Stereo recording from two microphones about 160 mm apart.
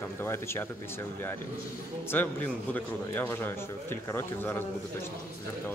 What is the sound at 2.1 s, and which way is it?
Speech, 10° left (ahead or behind).